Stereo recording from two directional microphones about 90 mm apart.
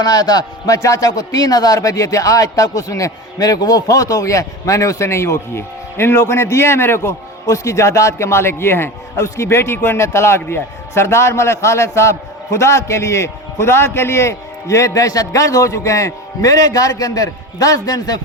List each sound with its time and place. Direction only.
0.0 s a man's voice: 45° left (ahead or behind)